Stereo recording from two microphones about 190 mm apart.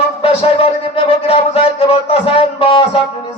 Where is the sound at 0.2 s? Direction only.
30° left (ahead or behind).